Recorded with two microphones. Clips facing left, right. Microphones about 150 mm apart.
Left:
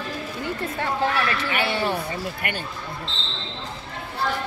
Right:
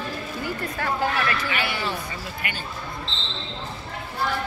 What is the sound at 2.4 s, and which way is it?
Speech, 55° left (ahead or behind).